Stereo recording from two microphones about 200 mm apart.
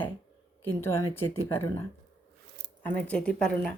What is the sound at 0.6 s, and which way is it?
Speech, 10° left (ahead or behind).